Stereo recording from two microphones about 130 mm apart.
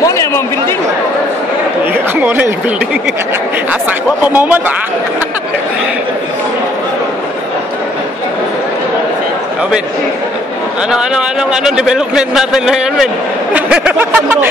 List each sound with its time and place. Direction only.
0.0 s speech: 20° left (ahead or behind)
2.1 s speech: 15° right (ahead or behind)
4.3 s speech: 10° right (ahead or behind)
10.9 s a man's voice: 5° right (ahead or behind)